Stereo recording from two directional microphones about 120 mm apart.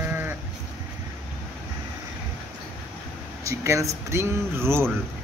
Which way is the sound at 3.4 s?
25° right (ahead or behind).